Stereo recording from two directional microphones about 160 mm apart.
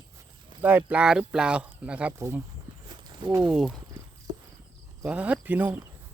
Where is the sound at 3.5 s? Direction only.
Centre (ahead or behind).